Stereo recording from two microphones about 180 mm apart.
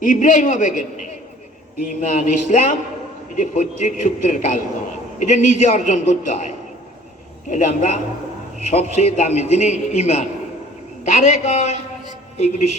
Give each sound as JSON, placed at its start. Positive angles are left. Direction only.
{"t": 0.0, "sound": "a man's voice", "side_deg": 50}
{"t": 7.5, "sound": "a man's voice", "side_deg": 40}